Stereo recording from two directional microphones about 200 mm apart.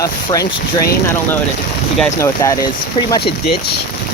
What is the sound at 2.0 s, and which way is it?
Speech, 15° left (ahead or behind).